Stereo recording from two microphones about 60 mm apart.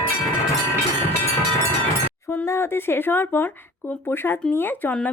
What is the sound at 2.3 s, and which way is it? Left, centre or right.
A woman's voice, left.